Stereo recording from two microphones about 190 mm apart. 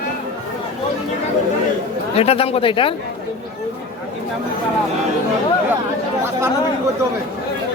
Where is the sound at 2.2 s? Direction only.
30° left (ahead or behind).